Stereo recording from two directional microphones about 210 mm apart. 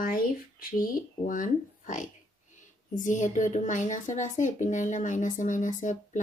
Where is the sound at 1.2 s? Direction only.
40° left (ahead or behind).